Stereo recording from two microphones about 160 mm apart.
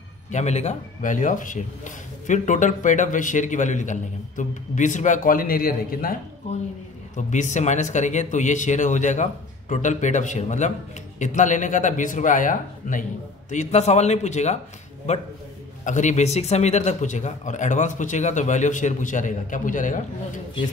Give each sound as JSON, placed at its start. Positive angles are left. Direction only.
{"t": 0.3, "sound": "a man's voice", "side_deg": 45}
{"t": 7.2, "sound": "a man's voice", "side_deg": 50}